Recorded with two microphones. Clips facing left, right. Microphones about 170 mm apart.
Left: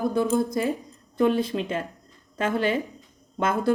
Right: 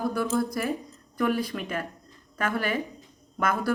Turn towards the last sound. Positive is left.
turn(degrees=25)  # may be behind; listen again after turning